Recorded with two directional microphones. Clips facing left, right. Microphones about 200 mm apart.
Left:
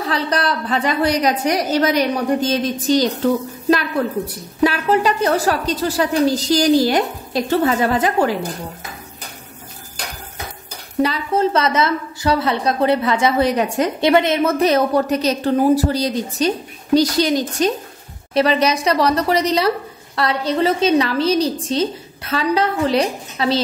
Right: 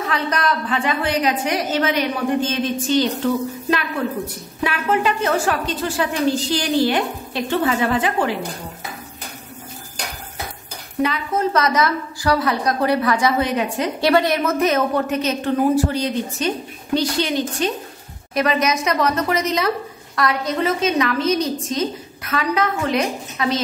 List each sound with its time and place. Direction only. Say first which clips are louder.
0.0 s a woman's voice: left 2 dB; 35° left (ahead or behind)
4.6 s a woman's voice: left 4 dB; 40° left (ahead or behind)
11.0 s a woman's voice: left 3 dB; 30° left (ahead or behind)